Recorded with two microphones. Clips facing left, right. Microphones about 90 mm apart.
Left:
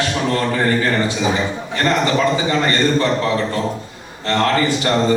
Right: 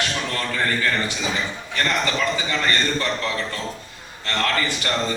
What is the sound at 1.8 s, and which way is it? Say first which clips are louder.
A man's voice: left 6 dB; 20° left (ahead or behind).